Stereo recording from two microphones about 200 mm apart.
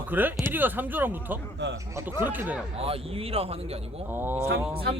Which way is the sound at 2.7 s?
30° right (ahead or behind).